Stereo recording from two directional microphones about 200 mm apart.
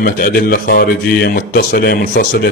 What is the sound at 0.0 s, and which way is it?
A man's voice, 50° left (ahead or behind).